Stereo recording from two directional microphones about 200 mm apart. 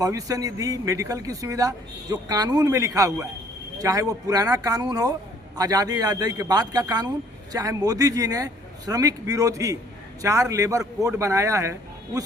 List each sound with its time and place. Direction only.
0.0 s a man's voice: 15° right (ahead or behind)